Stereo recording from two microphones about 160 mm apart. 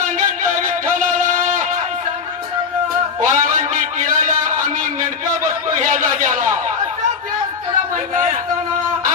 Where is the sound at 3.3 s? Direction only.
55° right (ahead or behind).